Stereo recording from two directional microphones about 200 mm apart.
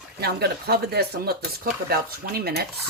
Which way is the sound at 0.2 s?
50° right (ahead or behind).